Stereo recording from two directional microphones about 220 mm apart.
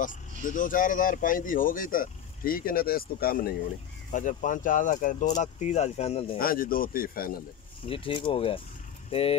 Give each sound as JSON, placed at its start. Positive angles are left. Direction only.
{"t": 0.0, "sound": "speech", "side_deg": 35}
{"t": 6.3, "sound": "speech", "side_deg": 40}
{"t": 7.8, "sound": "speech", "side_deg": 25}